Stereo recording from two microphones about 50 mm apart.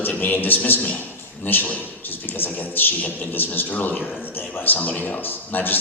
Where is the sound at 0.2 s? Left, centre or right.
Left.